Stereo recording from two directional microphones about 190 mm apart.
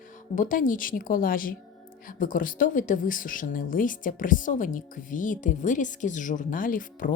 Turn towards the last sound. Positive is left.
turn(degrees=45)  # may be behind; listen again after turning